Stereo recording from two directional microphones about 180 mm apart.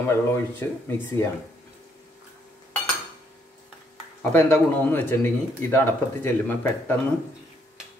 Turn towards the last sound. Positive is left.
turn(degrees=10)  # may be behind; listen again after turning